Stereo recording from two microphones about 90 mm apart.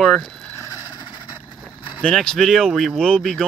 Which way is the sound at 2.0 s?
10° left (ahead or behind).